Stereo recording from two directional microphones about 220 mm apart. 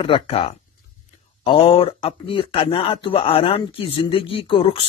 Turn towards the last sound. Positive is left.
turn(degrees=25)  # may be behind; listen again after turning